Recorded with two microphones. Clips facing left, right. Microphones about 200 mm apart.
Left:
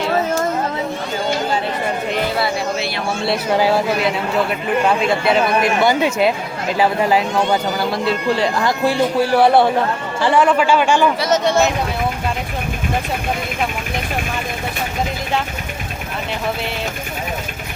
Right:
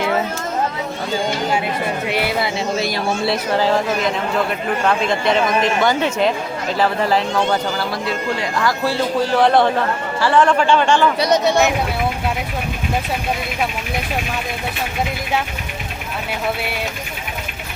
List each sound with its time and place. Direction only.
2.0 s speech: 10° right (ahead or behind)
3.6 s speech: 10° left (ahead or behind)
8.0 s speech: 25° left (ahead or behind)
8.8 s speech: 15° left (ahead or behind)
10.4 s speech: 5° left (ahead or behind)
11.2 s speech: 15° right (ahead or behind)